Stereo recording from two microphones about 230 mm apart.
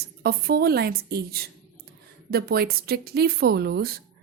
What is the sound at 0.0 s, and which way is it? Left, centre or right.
Speech, right.